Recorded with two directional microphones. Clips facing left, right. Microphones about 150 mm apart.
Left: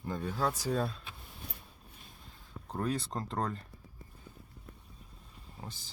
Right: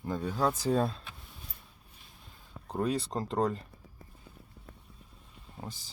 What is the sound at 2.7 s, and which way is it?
Speech, 10° right (ahead or behind).